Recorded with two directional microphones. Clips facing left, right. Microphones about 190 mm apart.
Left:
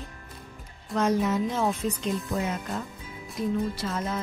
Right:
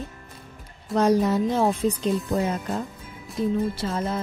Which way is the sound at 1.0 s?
35° right (ahead or behind).